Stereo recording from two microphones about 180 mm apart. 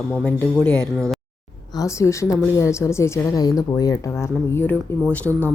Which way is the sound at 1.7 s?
20° left (ahead or behind).